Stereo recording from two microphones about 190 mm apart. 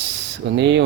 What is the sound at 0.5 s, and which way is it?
Speech, 65° right (ahead or behind).